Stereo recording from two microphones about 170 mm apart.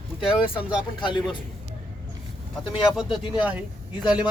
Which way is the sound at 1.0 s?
30° left (ahead or behind).